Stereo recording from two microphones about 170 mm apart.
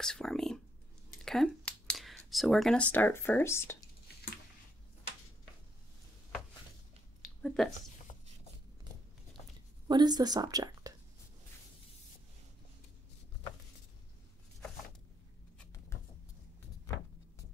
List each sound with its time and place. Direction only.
0.0 s speech: 5° left (ahead or behind)
7.4 s speech: centre (ahead or behind)
9.8 s a woman's voice: 25° right (ahead or behind)